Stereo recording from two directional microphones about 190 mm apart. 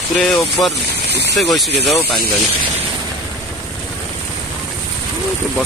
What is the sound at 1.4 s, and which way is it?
Speech, centre (ahead or behind).